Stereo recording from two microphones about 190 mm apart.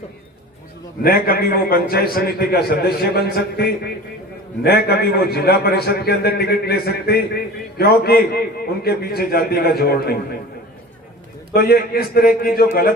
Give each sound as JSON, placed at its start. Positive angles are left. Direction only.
{"t": 1.0, "sound": "a man's voice", "side_deg": 50}
{"t": 11.5, "sound": "a man's voice", "side_deg": 55}